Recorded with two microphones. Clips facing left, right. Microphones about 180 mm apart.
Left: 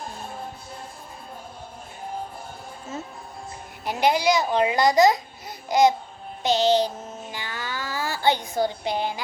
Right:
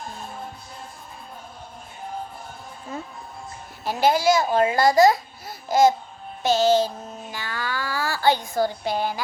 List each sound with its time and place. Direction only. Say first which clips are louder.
3.8 s child singing: right 2 dB; 20° left (ahead or behind)